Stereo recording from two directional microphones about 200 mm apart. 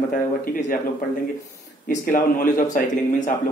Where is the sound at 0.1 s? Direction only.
40° left (ahead or behind).